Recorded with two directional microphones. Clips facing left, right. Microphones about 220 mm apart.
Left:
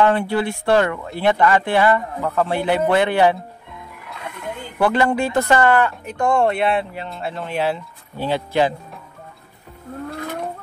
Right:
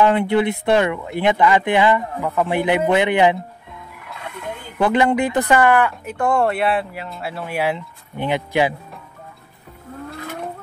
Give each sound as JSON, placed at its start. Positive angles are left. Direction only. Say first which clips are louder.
{"t": 0.0, "sound": "speech", "louder": "right 2 dB", "side_deg": -20}
{"t": 4.8, "sound": "speech", "louder": "right 1 dB", "side_deg": -20}